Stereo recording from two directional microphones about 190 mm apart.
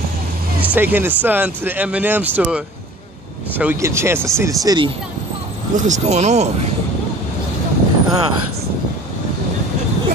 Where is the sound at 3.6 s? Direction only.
10° right (ahead or behind).